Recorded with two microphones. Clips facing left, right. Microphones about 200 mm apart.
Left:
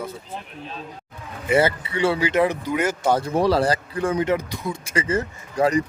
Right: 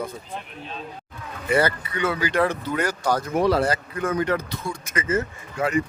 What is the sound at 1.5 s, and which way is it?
Speech, 25° left (ahead or behind).